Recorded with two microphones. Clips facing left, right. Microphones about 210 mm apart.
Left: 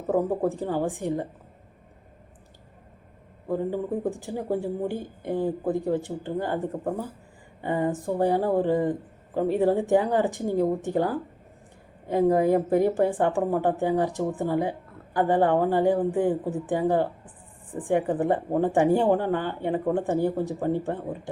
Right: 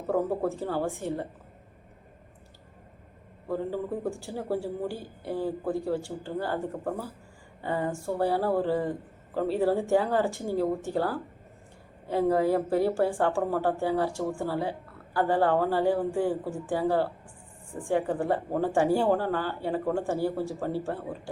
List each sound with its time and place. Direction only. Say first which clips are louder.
0.1 s a woman's voice: left 3 dB; 15° left (ahead or behind)
3.5 s a woman's voice: left 3 dB; 15° left (ahead or behind)